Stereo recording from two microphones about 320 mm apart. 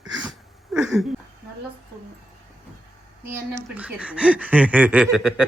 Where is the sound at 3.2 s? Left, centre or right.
Centre.